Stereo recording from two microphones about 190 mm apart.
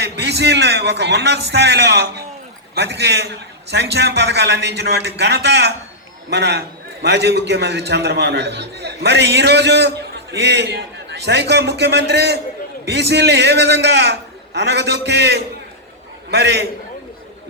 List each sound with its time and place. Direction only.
0.0 s a man's voice: 60° right (ahead or behind)